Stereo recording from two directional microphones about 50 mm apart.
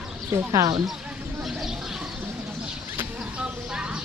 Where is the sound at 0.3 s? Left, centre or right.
Right.